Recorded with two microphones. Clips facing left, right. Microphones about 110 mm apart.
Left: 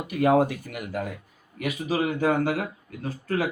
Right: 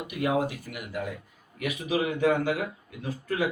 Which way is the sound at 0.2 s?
45° left (ahead or behind).